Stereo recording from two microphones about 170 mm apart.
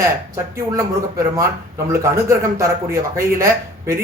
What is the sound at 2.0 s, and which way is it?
Speech, 15° right (ahead or behind).